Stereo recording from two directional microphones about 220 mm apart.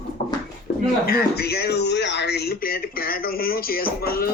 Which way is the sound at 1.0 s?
45° left (ahead or behind).